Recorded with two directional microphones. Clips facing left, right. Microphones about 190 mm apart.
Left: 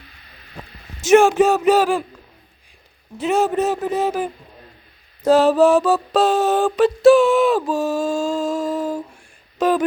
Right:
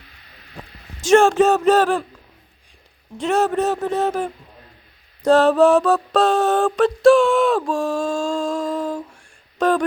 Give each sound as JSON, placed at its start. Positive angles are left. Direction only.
{"t": 1.2, "sound": "mantra", "side_deg": 0}
{"t": 3.2, "sound": "mantra", "side_deg": 0}
{"t": 5.3, "sound": "mantra", "side_deg": 0}
{"t": 9.6, "sound": "speech", "side_deg": 5}